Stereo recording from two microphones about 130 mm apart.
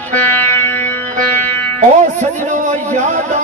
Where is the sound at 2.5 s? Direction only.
70° right (ahead or behind).